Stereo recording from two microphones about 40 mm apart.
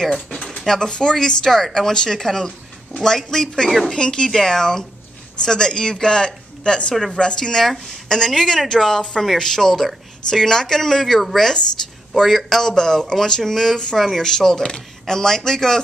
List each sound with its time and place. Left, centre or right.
0.0 s a sound: centre
0.7 s speech: centre
7.6 s speech: centre